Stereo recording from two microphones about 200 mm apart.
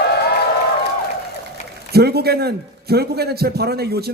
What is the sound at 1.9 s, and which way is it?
Speech, 50° right (ahead or behind).